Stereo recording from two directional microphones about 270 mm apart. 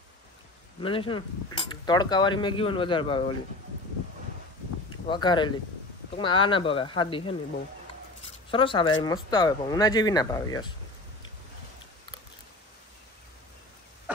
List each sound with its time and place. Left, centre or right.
0.7 s speech: centre
5.0 s speech: centre
8.5 s speech: centre